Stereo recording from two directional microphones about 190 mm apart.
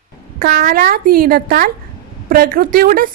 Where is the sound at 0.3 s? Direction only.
50° right (ahead or behind).